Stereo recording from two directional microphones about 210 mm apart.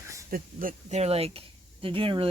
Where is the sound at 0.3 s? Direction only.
40° right (ahead or behind).